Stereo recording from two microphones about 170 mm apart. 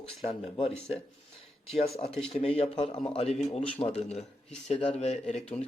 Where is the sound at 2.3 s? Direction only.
35° left (ahead or behind).